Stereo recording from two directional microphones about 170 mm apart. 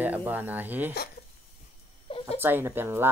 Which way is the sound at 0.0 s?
10° right (ahead or behind).